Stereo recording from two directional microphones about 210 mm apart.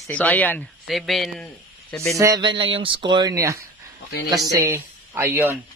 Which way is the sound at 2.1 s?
15° right (ahead or behind).